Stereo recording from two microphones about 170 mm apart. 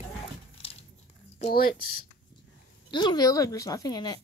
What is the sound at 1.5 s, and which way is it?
Speech, 60° left (ahead or behind).